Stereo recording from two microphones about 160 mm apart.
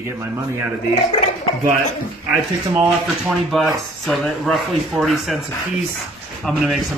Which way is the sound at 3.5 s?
Centre (ahead or behind).